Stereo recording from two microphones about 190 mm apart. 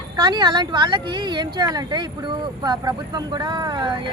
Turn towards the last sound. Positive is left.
turn(degrees=-20)  # may be behind; listen again after turning